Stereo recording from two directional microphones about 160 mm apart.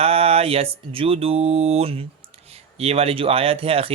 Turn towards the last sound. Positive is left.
turn(degrees=-35)  # may be behind; listen again after turning